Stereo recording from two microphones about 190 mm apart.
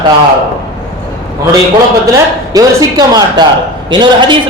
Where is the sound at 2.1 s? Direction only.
20° right (ahead or behind).